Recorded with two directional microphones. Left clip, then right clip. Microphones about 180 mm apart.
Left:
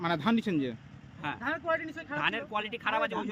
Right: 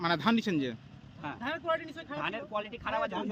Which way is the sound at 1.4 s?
30° right (ahead or behind).